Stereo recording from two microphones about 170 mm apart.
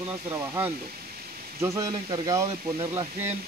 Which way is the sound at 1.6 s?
15° right (ahead or behind).